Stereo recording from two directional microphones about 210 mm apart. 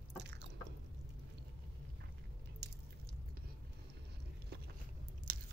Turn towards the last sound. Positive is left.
turn(degrees=-40)  # may be behind; listen again after turning